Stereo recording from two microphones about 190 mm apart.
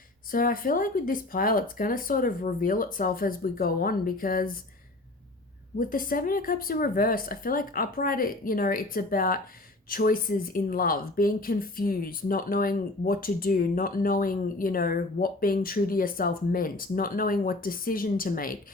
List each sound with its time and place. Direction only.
0.3 s speech: 50° left (ahead or behind)
5.8 s speech: 50° left (ahead or behind)